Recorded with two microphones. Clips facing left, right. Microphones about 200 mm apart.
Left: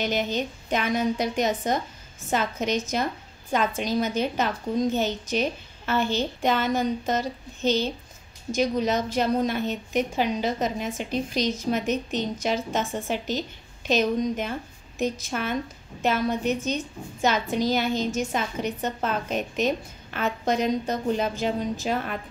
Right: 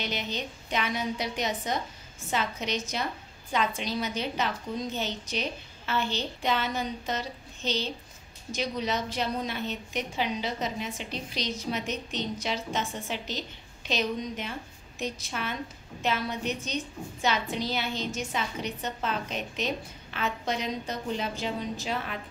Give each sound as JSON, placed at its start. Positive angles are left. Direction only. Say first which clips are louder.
{"t": 0.0, "sound": "a woman's voice", "louder": "left 7 dB", "side_deg": 45}